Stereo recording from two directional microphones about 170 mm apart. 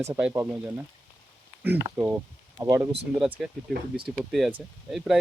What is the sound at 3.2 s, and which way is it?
Speech, centre (ahead or behind).